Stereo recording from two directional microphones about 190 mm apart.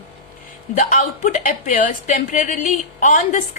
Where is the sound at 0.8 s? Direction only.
40° left (ahead or behind).